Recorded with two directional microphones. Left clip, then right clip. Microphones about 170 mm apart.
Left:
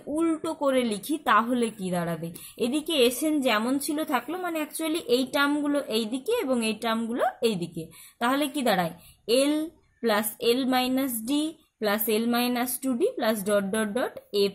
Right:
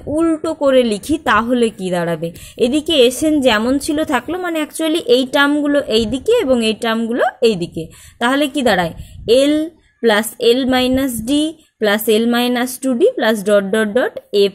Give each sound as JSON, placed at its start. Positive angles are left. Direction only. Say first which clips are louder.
{"t": 0.1, "sound": "a woman's voice", "louder": "right 10 dB", "side_deg": -20}